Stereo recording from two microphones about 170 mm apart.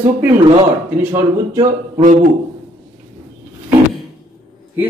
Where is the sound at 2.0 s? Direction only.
50° right (ahead or behind).